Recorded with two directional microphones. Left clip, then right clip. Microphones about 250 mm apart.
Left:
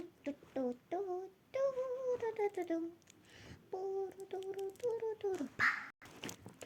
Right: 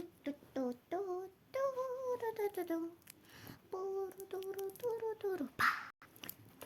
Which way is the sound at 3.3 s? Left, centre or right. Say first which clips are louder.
Even; centre.